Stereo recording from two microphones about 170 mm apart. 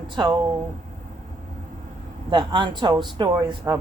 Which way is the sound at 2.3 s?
25° right (ahead or behind).